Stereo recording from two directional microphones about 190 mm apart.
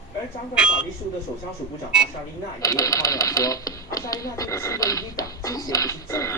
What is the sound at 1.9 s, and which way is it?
Speech, 5° right (ahead or behind).